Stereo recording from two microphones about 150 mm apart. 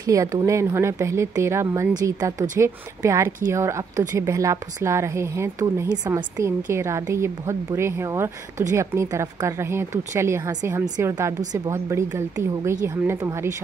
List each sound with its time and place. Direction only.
0.0 s a woman's voice: 20° right (ahead or behind)